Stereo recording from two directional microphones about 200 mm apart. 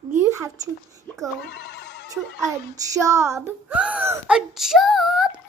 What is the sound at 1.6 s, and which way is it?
Ringtone, 55° left (ahead or behind).